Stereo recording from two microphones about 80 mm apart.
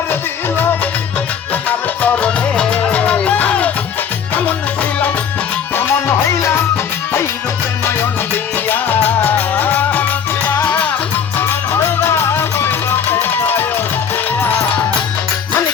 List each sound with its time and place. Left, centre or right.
0.1 s music: left
8.7 s music: left
11.3 s music: left